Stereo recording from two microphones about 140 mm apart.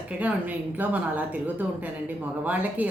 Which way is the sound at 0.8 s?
10° right (ahead or behind).